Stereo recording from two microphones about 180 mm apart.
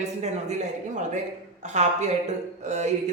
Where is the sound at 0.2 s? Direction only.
40° right (ahead or behind).